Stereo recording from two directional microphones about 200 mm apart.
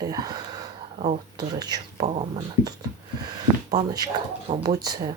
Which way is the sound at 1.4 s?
20° right (ahead or behind).